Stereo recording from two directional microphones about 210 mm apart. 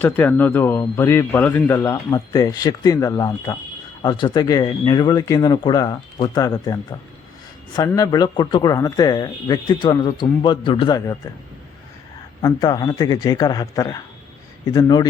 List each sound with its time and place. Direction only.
0.0 s speech: 10° left (ahead or behind)
7.8 s speech: 20° left (ahead or behind)
12.4 s speech: 15° left (ahead or behind)